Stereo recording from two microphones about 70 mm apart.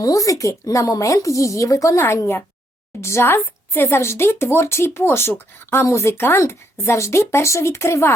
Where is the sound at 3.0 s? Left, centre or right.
Left.